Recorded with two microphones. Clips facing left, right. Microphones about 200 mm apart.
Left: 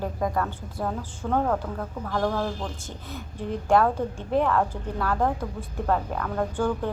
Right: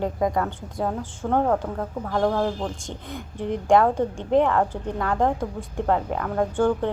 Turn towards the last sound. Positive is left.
turn(degrees=-20)  # may be behind; listen again after turning